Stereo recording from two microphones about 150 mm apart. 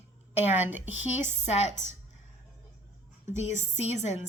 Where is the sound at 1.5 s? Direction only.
45° left (ahead or behind).